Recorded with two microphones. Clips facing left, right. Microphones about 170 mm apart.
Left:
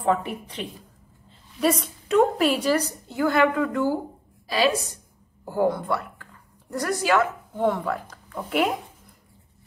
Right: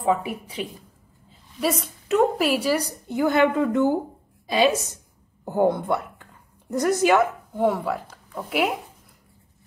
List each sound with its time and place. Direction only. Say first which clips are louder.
0.0 s a woman's voice: right 1 dB; 5° right (ahead or behind)